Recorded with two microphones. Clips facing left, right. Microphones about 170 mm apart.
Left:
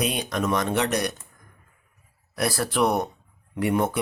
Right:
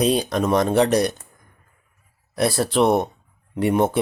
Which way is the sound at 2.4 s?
25° right (ahead or behind).